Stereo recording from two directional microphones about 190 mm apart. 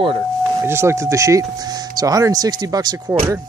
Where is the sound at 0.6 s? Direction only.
15° right (ahead or behind).